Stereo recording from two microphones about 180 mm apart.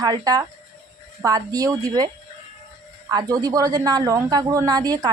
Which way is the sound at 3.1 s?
20° right (ahead or behind).